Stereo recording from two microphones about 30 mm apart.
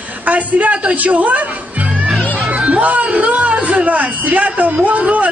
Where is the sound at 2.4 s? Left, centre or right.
Right.